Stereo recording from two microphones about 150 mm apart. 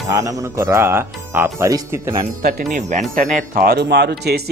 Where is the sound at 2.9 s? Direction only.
60° right (ahead or behind); by 4.4 s 90° right.